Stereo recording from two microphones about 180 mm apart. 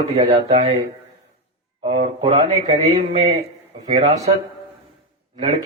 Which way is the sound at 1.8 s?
40° right (ahead or behind).